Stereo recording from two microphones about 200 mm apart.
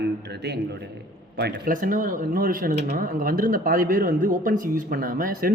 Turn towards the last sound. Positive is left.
turn(degrees=-45)  # may be behind; listen again after turning